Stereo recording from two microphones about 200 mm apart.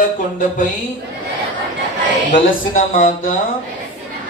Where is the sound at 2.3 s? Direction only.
40° left (ahead or behind).